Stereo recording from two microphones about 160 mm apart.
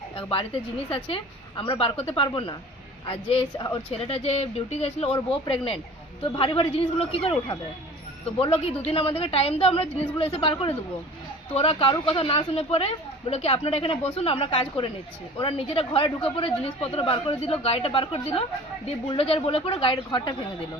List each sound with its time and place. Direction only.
0.2 s speech: 35° left (ahead or behind)